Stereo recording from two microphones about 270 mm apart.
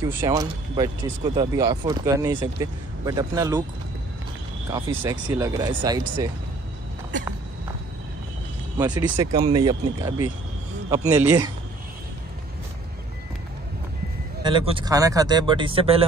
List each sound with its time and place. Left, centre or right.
0.0 s speech: centre
4.6 s speech: centre
8.7 s speech: centre
14.4 s speech: centre